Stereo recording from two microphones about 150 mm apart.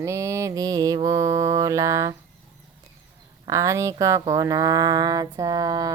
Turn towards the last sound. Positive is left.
turn(degrees=-25)  # may be behind; listen again after turning